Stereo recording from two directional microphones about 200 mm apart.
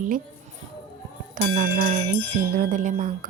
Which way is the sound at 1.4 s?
40° right (ahead or behind).